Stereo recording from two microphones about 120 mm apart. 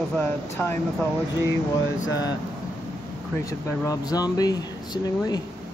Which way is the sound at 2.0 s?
30° left (ahead or behind).